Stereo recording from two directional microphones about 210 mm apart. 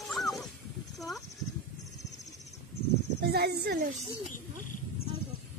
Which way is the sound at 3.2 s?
50° right (ahead or behind).